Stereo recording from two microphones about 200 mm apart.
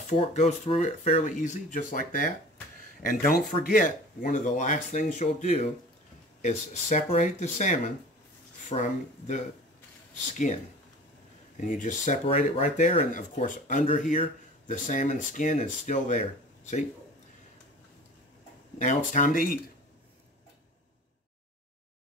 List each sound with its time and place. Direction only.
0.0 s speech: 35° left (ahead or behind)
13.8 s speech: 30° left (ahead or behind)
18.8 s speech: 40° left (ahead or behind)